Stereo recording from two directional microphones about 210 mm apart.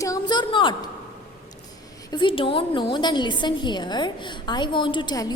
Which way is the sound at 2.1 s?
25° left (ahead or behind).